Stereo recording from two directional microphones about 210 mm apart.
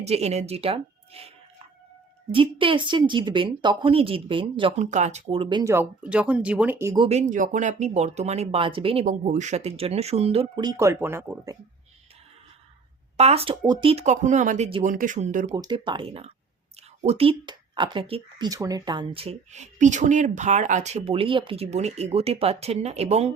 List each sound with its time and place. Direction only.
0.0 s speech: 30° right (ahead or behind)
2.3 s speech: 25° right (ahead or behind)
5.7 s speech: 5° right (ahead or behind)
7.1 s speech: 35° right (ahead or behind); by 11.5 s 10° right (ahead or behind)
13.1 s speech: 30° right (ahead or behind)
15.5 s speech: 20° right (ahead or behind)